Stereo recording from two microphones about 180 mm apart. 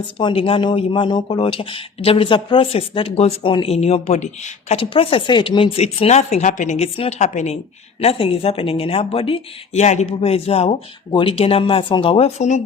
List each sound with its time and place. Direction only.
0.2 s speech: 30° left (ahead or behind)